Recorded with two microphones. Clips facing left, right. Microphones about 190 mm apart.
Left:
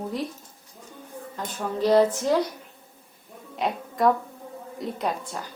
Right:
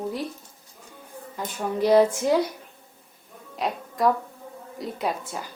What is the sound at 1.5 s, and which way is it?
Speech, 10° right (ahead or behind).